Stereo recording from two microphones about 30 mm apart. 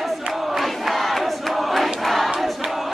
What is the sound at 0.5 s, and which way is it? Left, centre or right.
Crowd, centre.